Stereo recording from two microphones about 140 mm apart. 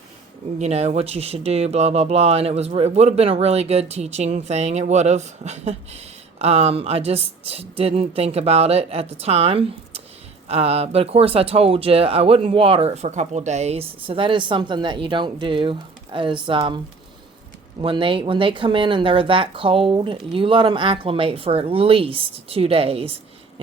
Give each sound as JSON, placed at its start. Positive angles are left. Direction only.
{"t": 0.6, "sound": "speech", "side_deg": -50}